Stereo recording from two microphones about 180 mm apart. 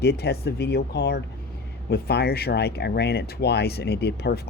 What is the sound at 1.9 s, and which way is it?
Speech, 60° left (ahead or behind).